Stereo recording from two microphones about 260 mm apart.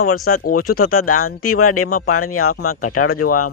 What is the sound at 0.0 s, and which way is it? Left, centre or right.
Speech, left.